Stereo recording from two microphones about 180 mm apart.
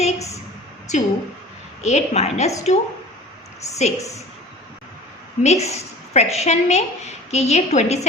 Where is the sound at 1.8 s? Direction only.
35° left (ahead or behind).